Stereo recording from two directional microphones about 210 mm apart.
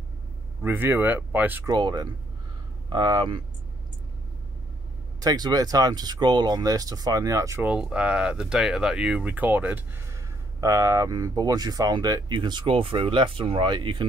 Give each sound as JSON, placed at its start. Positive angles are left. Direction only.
{"t": 0.6, "sound": "speech", "side_deg": -10}
{"t": 5.2, "sound": "speech", "side_deg": -20}